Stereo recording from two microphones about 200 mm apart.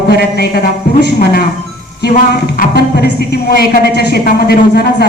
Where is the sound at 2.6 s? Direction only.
55° left (ahead or behind).